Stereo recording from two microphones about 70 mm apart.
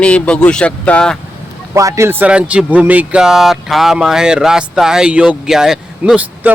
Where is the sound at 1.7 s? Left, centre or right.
Right.